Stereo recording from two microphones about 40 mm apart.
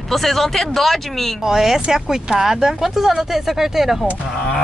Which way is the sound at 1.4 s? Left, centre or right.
Centre.